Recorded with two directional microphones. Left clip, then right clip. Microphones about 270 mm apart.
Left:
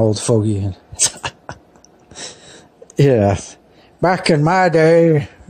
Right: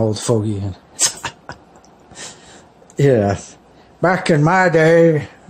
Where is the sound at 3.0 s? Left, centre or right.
Left.